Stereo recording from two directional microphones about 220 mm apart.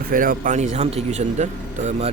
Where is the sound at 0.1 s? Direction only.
40° right (ahead or behind).